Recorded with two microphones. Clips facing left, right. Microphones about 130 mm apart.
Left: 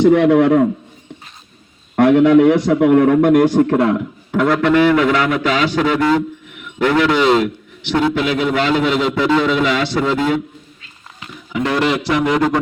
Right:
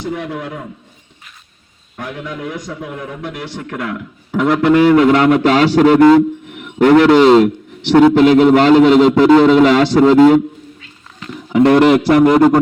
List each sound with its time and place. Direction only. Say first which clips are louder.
0.0 s a man's voice: left 13 dB; 80° left
2.0 s a man's voice: left 17 dB; 75° left (ahead or behind); by 3.8 s 40° left (ahead or behind)
3.8 s speech: left 8 dB; 30° left (ahead or behind)
4.3 s a sound: right 1 dB; 10° right (ahead or behind)
4.5 s a man's voice: right 4 dB; 30° right (ahead or behind)
11.5 s a man's voice: right 8 dB; 50° right (ahead or behind)